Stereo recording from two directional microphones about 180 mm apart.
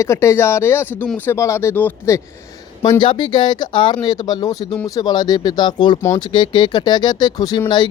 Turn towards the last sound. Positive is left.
turn(degrees=25)  # may be behind; listen again after turning